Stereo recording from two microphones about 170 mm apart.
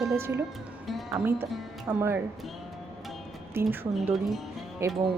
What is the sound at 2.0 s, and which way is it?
Speech, 15° right (ahead or behind).